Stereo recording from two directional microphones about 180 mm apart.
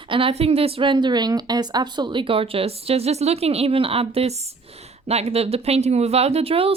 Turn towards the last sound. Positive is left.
turn(degrees=-30)  # may be behind; listen again after turning